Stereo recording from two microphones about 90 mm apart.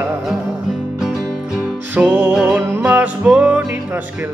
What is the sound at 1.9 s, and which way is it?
Music, 15° right (ahead or behind).